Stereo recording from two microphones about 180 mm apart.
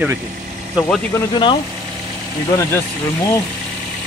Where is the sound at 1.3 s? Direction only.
25° left (ahead or behind).